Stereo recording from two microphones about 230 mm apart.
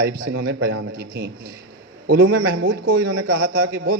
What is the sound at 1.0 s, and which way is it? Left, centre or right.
Speech, right.